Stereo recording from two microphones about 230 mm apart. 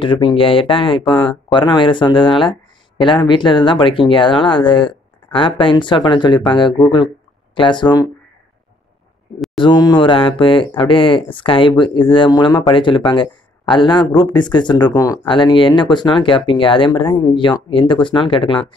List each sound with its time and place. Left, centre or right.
0.0 s speech: left
1.1 s speech: centre
1.5 s speech: left
9.6 s speech: centre